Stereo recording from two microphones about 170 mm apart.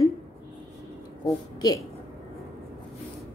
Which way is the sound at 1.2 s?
20° left (ahead or behind).